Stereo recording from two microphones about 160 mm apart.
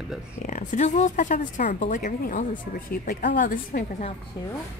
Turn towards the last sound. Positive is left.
turn(degrees=60)  # may be behind; listen again after turning